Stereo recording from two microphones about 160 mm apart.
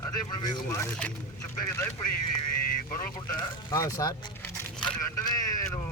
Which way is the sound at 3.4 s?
25° left (ahead or behind).